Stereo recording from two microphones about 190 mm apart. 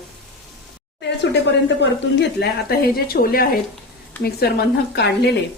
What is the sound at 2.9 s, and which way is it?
A woman's voice, 50° left (ahead or behind).